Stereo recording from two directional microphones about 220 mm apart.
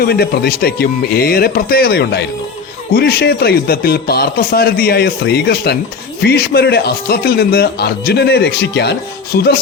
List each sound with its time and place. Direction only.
0.0 s speech: 45° left (ahead or behind)